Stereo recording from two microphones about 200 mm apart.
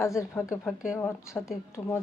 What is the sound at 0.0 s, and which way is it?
Speech, 15° left (ahead or behind).